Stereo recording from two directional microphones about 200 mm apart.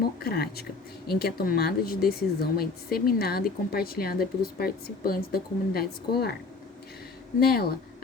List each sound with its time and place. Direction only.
0.2 s speech: 50° left (ahead or behind)
7.3 s speech: 50° left (ahead or behind)